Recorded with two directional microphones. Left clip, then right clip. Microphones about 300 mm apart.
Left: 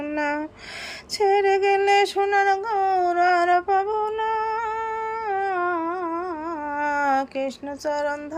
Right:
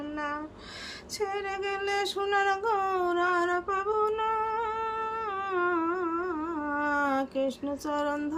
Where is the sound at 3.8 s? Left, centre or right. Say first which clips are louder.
Left 3 dB; right.